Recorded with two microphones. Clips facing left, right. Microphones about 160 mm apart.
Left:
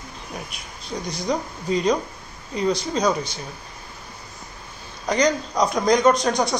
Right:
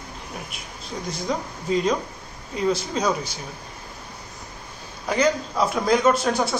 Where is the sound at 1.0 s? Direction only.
Centre (ahead or behind).